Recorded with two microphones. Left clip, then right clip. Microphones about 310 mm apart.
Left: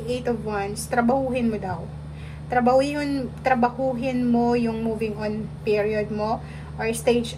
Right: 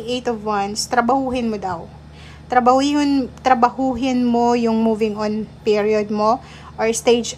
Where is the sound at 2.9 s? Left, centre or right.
Centre.